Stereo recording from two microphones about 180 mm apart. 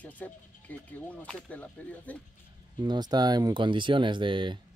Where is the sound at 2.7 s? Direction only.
25° right (ahead or behind).